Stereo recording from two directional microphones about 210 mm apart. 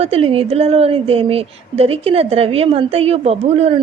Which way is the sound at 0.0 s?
25° right (ahead or behind).